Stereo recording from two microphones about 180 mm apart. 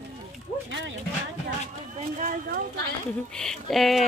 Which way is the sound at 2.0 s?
50° right (ahead or behind).